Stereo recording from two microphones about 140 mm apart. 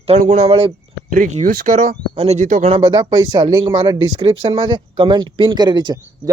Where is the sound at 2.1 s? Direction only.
50° right (ahead or behind).